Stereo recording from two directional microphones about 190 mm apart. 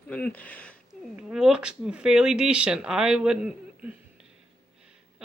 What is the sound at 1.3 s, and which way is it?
Speech, 5° right (ahead or behind).